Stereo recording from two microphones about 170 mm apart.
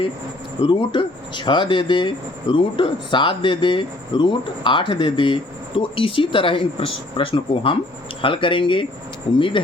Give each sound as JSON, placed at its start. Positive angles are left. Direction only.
{"t": 0.6, "sound": "speech", "side_deg": 30}